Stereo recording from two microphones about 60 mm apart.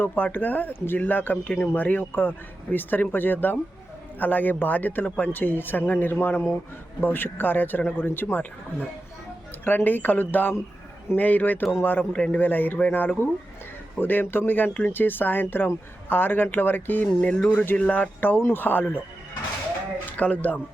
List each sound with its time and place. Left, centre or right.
0.1 s speech: left
9.6 s speech: left
14.7 s speech: left
14.9 s speech: left
20.1 s speech: left